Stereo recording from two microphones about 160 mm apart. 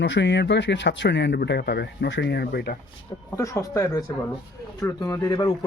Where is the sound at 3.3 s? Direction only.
20° left (ahead or behind).